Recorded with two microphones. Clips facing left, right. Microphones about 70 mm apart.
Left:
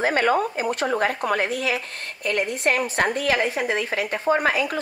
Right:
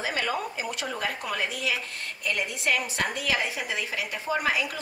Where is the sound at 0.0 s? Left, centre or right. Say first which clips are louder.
Left 9 dB; left.